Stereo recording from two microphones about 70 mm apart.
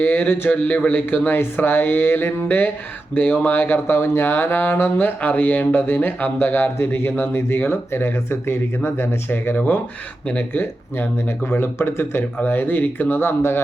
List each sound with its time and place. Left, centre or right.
0.0 s speech: left